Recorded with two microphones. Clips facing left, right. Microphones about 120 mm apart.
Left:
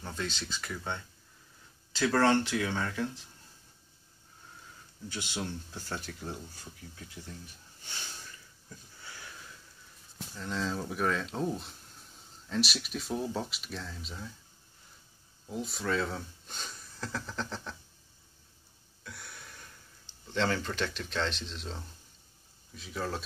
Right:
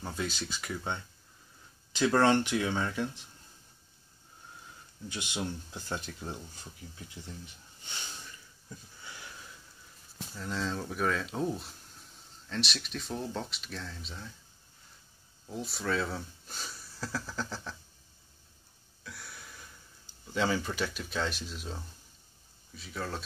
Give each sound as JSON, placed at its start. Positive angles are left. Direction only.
{"t": 0.0, "sound": "speech", "side_deg": -10}
{"t": 5.1, "sound": "speech", "side_deg": -15}
{"t": 10.3, "sound": "speech", "side_deg": 0}
{"t": 15.4, "sound": "speech", "side_deg": 0}
{"t": 19.0, "sound": "a sound", "side_deg": 0}
{"t": 20.2, "sound": "speech", "side_deg": -10}